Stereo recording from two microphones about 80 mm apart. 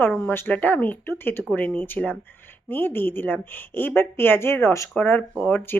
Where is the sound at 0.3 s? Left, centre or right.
Left.